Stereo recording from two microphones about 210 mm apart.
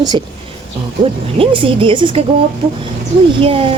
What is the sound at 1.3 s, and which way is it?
Speech, 25° right (ahead or behind).